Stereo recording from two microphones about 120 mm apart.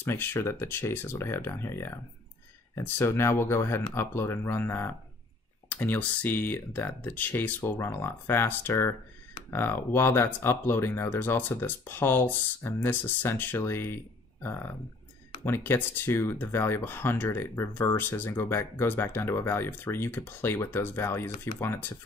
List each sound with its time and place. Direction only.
0.0 s speech: 20° left (ahead or behind)